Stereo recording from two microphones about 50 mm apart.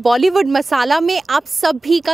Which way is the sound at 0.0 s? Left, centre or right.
Centre.